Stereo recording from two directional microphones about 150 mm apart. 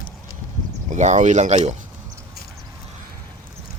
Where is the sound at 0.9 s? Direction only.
55° right (ahead or behind).